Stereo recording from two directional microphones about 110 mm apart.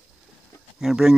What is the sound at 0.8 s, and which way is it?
Speech, 5° right (ahead or behind).